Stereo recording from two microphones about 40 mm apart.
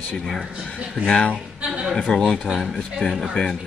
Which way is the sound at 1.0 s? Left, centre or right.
Left.